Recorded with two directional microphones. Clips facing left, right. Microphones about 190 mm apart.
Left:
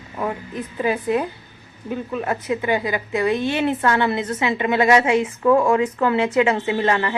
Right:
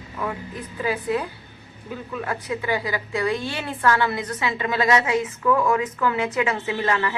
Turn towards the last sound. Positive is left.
turn(degrees=30)  # may be behind; listen again after turning